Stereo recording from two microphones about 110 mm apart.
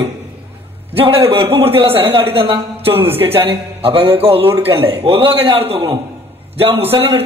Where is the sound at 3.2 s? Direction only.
55° right (ahead or behind).